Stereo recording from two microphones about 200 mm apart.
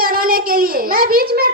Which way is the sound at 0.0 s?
45° right (ahead or behind).